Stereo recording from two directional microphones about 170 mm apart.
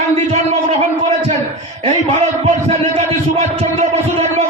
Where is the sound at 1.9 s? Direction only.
45° right (ahead or behind).